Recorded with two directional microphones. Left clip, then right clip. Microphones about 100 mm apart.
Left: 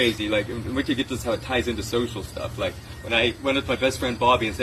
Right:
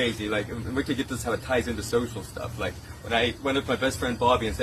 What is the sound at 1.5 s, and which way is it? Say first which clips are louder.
Speech: left 1 dB; 50° right (ahead or behind).